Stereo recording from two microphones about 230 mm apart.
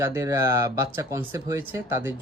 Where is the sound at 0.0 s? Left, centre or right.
Centre.